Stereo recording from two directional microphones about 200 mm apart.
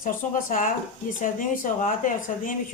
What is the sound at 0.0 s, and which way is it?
A woman's voice, 45° left (ahead or behind).